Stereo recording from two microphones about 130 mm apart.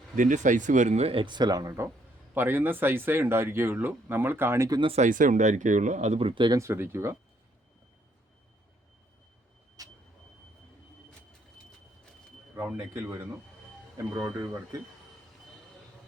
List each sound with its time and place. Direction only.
0.2 s speech: 75° right (ahead or behind); by 4.8 s 20° right (ahead or behind)
4.9 s speech: 80° right; by 6.6 s 40° right (ahead or behind)
6.6 s speech: 20° right (ahead or behind)
9.8 s vehicle: 25° right (ahead or behind)
12.5 s speech: 15° right (ahead or behind)
14.3 s speech: 25° right (ahead or behind)